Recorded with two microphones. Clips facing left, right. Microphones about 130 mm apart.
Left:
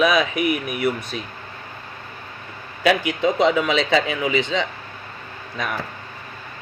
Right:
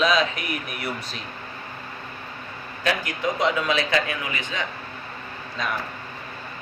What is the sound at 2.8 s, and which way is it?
Speech, 80° left.